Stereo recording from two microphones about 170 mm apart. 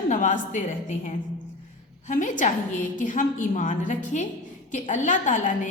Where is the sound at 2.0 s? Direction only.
50° left (ahead or behind).